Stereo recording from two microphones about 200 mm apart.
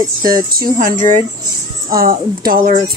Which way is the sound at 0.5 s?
45° right (ahead or behind).